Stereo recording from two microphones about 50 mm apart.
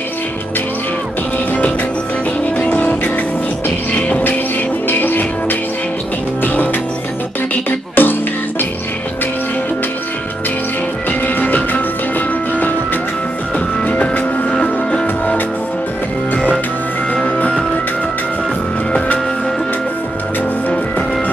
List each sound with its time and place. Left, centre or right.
2.6 s music: left
4.8 s music: left
7.9 s music: left
11.1 s music: left
13.8 s music: left
17.1 s music: left